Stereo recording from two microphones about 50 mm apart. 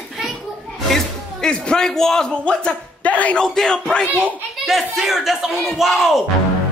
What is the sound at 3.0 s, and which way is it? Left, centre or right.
Speech, left.